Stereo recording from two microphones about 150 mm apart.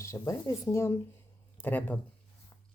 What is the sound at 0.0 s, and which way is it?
Speech, 20° left (ahead or behind).